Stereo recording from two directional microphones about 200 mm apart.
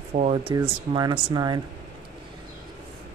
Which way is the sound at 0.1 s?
35° right (ahead or behind).